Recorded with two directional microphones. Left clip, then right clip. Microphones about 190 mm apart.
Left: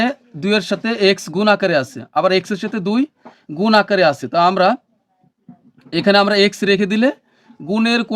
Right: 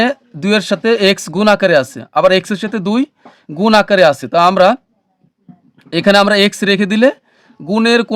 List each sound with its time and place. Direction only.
0.0 s speech: 40° right (ahead or behind)
5.8 s speech: 40° right (ahead or behind)